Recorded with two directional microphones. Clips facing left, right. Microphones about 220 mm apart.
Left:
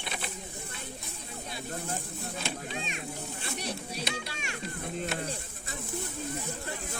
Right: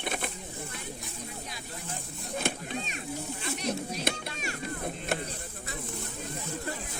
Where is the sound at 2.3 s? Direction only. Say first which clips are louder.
Right 6 dB; 50° right (ahead or behind).